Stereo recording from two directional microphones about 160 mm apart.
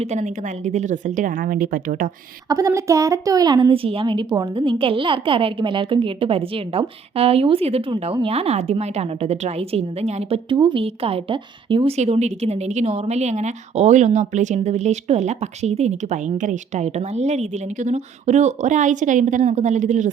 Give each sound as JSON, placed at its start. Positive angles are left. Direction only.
{"t": 0.0, "sound": "a woman's voice", "side_deg": -45}
{"t": 2.5, "sound": "a woman's voice", "side_deg": -20}
{"t": 11.9, "sound": "a woman's voice", "side_deg": -45}